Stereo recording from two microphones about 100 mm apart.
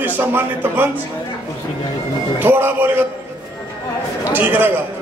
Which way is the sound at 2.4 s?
20° right (ahead or behind).